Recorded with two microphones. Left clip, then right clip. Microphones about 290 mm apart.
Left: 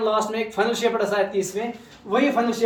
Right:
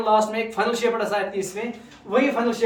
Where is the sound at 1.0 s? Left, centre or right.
Right.